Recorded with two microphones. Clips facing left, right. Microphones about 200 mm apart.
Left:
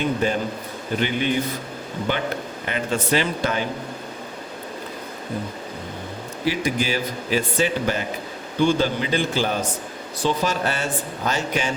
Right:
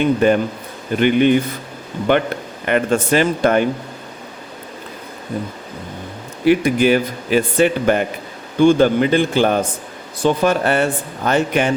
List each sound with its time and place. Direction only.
0.2 s speech: 60° right (ahead or behind)
6.4 s speech: 60° right (ahead or behind)